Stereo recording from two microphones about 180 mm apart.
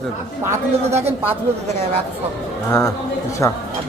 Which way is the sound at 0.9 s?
35° right (ahead or behind).